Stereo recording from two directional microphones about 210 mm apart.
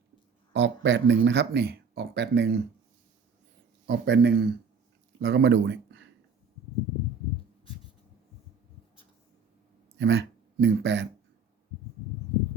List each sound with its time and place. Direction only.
0.5 s speech: 60° right (ahead or behind)
3.8 s speech: 55° right (ahead or behind)
10.0 s speech: 55° right (ahead or behind)